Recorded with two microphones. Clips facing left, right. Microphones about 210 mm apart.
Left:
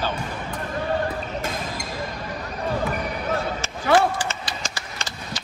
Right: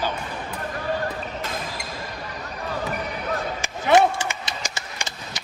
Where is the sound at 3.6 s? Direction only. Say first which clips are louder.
Right 3 dB; 20° right (ahead or behind).